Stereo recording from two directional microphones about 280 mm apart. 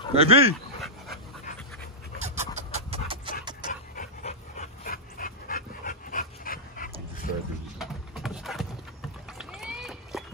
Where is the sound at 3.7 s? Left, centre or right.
Left.